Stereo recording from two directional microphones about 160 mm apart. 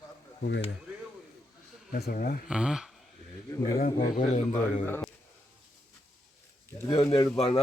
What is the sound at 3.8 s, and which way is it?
Speech, 50° left (ahead or behind).